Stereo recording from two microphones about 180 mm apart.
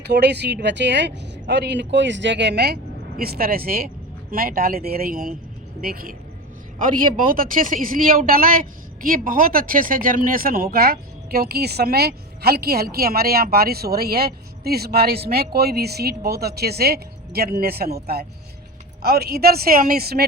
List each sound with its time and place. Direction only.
0.1 s speech: 65° right (ahead or behind)
3.2 s speech: 55° right (ahead or behind)